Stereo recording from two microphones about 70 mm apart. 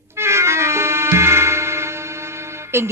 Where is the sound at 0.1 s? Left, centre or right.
Right.